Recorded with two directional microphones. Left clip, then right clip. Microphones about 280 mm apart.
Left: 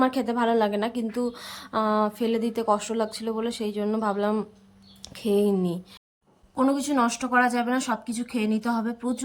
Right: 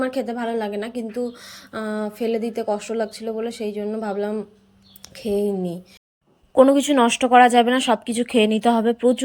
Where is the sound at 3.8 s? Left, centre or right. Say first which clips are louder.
Even; left.